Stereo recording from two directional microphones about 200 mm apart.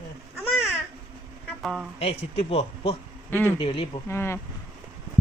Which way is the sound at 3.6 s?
25° left (ahead or behind).